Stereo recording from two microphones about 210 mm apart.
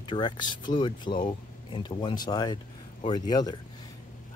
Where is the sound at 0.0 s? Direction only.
20° left (ahead or behind).